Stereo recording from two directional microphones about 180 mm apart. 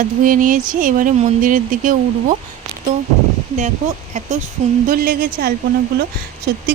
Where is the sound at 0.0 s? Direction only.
50° right (ahead or behind).